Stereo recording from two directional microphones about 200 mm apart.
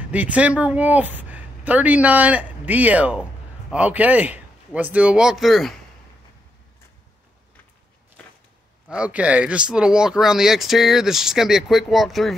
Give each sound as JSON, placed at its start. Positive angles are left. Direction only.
{"t": 0.1, "sound": "speech", "side_deg": -5}
{"t": 8.8, "sound": "speech", "side_deg": -5}